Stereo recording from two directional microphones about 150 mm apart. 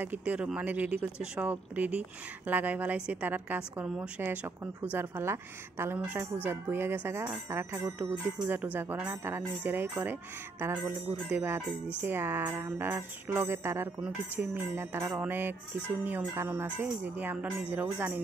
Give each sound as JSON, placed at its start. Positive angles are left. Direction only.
{"t": 0.0, "sound": "speech", "side_deg": -10}